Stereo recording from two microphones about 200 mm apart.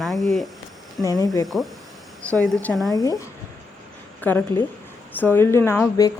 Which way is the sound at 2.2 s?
5° left (ahead or behind).